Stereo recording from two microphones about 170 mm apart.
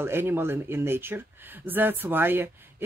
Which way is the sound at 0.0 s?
15° right (ahead or behind).